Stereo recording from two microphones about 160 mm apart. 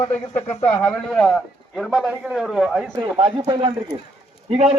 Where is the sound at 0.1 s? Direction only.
10° left (ahead or behind).